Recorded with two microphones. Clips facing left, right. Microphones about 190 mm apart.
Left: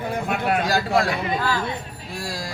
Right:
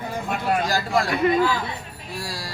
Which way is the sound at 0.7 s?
60° left (ahead or behind).